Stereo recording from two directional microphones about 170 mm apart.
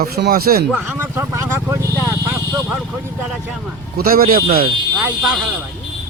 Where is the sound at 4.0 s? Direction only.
60° right (ahead or behind).